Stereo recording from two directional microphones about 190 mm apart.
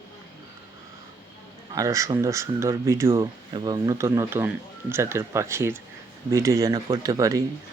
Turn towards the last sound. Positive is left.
turn(degrees=-15)  # may be behind; listen again after turning